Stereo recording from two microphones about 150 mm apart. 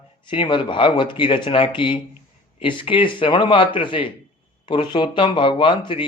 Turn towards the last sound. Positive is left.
turn(degrees=35)  # may be behind; listen again after turning